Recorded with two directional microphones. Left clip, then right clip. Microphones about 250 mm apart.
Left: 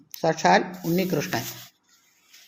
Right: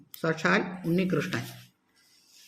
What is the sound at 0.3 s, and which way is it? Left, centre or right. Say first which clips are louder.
Speech: left 7 dB; centre.